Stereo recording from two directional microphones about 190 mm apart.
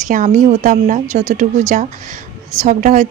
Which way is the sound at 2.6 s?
40° right (ahead or behind).